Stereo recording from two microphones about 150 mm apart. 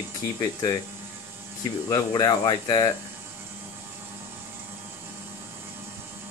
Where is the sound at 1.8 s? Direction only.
25° left (ahead or behind).